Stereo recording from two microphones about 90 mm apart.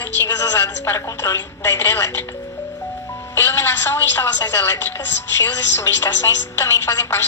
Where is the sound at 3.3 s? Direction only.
25° left (ahead or behind).